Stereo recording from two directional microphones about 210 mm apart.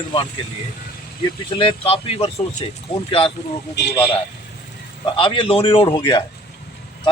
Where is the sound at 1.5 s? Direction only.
25° left (ahead or behind).